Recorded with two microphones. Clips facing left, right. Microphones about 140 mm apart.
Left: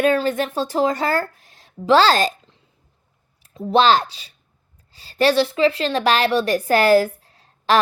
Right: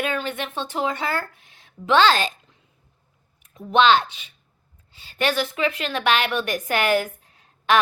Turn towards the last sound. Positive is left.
turn(degrees=35)  # may be behind; listen again after turning